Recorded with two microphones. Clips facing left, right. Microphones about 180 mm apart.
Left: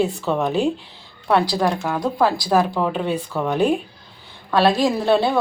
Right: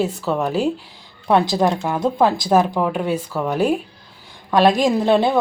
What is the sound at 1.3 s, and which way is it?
Speech, 20° right (ahead or behind).